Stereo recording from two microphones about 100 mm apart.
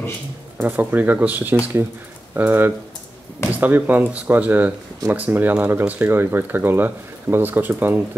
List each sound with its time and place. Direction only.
0.6 s speech: 15° right (ahead or behind)